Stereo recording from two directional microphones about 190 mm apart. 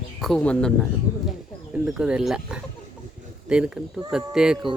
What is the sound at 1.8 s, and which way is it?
Speech, 5° right (ahead or behind).